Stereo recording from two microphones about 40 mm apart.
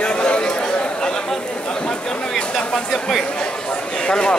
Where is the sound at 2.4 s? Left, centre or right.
Centre.